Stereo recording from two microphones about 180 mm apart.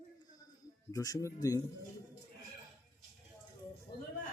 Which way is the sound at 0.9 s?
20° left (ahead or behind).